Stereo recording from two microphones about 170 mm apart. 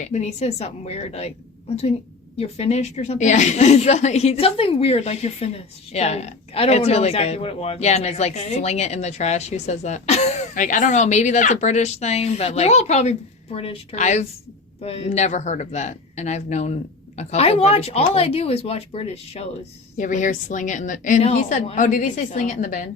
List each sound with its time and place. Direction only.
0.0 s a woman's voice: 40° left (ahead or behind)
2.4 s a woman's voice: 40° left (ahead or behind)